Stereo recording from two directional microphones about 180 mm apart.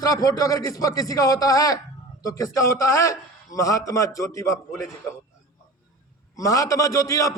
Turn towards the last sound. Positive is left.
turn(degrees=20)  # may be behind; listen again after turning